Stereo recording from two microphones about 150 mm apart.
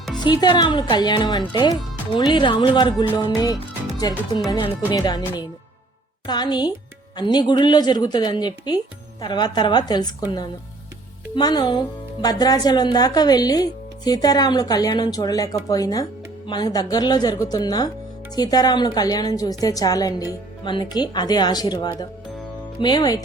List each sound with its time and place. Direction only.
0.2 s speech: 30° left (ahead or behind)